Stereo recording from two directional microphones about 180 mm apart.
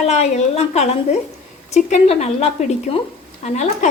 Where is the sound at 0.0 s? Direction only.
35° left (ahead or behind).